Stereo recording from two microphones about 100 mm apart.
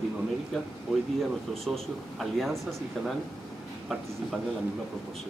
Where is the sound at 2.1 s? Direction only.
Centre (ahead or behind).